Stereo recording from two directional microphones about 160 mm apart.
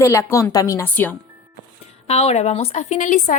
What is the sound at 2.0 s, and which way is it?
A woman's voice, 40° left (ahead or behind).